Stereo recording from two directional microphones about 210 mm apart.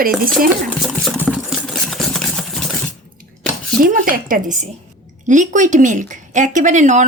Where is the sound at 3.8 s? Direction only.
40° right (ahead or behind).